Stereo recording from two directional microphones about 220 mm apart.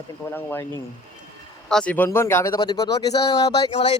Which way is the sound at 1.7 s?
5° left (ahead or behind).